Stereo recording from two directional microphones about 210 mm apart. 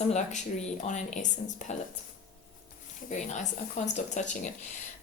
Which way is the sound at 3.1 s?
35° left (ahead or behind).